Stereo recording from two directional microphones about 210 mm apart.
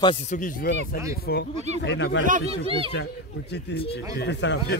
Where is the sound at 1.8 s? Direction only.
55° left (ahead or behind).